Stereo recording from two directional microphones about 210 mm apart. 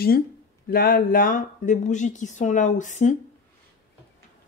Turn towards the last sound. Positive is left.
turn(degrees=35)  # may be behind; listen again after turning